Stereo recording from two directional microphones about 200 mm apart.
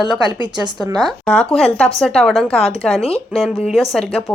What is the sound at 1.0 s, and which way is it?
Speech, 5° left (ahead or behind).